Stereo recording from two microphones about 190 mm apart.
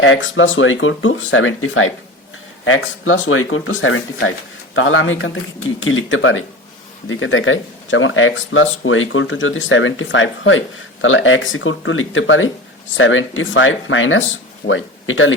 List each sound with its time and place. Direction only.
0.0 s speech: 90° left